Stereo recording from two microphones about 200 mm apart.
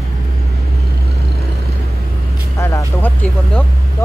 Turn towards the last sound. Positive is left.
turn(degrees=10)  # may be behind; listen again after turning